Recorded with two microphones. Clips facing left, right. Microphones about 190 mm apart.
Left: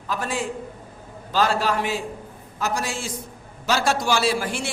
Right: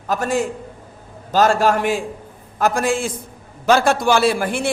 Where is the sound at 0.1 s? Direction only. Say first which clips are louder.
Right 7 dB; 45° right (ahead or behind).